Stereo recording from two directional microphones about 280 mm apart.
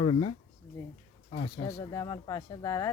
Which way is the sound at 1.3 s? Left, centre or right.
Left.